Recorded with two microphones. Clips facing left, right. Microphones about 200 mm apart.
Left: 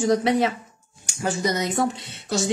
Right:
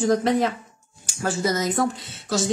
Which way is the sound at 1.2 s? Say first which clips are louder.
Even; 15° left (ahead or behind).